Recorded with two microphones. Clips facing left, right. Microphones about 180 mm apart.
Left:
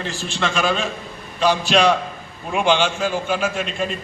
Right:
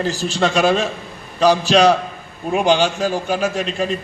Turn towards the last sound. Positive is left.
turn(degrees=-40)  # may be behind; listen again after turning